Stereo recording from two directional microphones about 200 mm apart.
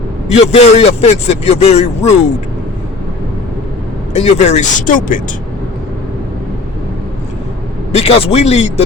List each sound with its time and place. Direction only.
0.3 s a man's voice: 30° left (ahead or behind)
4.1 s a man's voice: 35° left (ahead or behind)
7.9 s a man's voice: 30° left (ahead or behind)